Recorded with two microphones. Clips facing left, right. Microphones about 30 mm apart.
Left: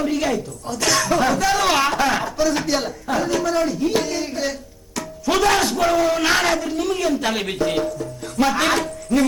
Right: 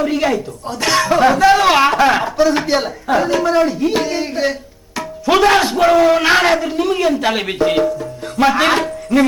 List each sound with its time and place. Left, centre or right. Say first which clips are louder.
0.0 s speech: right 5 dB; right